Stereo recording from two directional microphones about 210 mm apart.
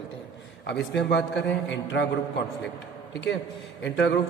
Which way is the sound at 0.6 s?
55° left (ahead or behind).